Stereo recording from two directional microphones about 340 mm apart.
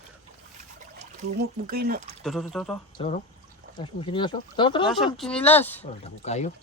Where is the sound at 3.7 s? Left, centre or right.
Centre.